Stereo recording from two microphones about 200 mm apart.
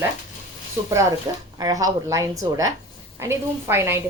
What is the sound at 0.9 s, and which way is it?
A woman's voice, 15° right (ahead or behind).